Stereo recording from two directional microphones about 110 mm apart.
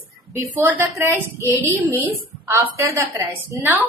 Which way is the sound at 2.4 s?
25° right (ahead or behind).